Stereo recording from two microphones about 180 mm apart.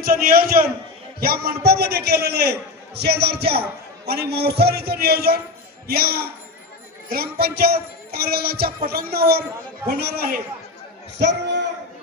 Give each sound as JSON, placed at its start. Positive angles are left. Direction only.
{"t": 0.0, "sound": "a man's voice", "side_deg": -55}
{"t": 11.1, "sound": "a man's voice", "side_deg": -75}